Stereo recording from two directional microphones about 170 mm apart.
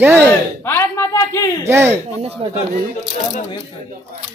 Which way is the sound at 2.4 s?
35° right (ahead or behind).